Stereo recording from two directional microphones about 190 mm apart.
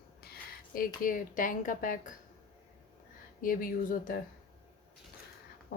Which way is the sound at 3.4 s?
45° left (ahead or behind).